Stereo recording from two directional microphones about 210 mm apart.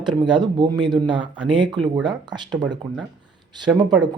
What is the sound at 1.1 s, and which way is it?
Speech, 5° right (ahead or behind).